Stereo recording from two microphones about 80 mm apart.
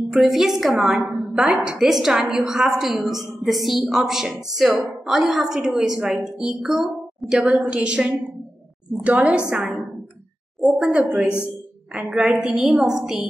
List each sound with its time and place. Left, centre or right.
0.1 s a woman's voice: centre
10.6 s a woman's voice: centre